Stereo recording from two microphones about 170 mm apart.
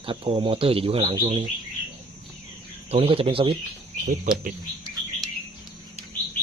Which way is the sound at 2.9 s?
35° right (ahead or behind).